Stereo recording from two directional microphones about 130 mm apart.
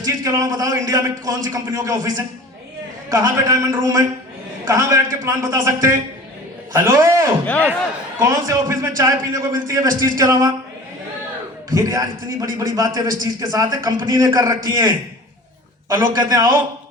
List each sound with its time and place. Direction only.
0.0 s a man's voice: 25° right (ahead or behind)
7.4 s speech: 10° left (ahead or behind)
8.2 s a man's voice: 25° right (ahead or behind)
11.7 s a man's voice: 25° right (ahead or behind)